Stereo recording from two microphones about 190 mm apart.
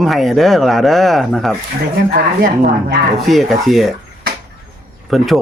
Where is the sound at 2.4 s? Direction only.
45° right (ahead or behind).